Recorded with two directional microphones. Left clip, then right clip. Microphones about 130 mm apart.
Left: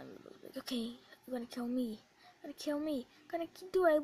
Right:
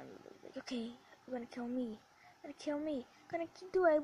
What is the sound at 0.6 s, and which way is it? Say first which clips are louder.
Speech: left 3 dB; 90° left.